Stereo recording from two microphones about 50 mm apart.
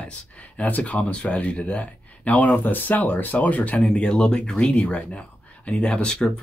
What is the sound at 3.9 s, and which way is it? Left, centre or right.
Speech, centre.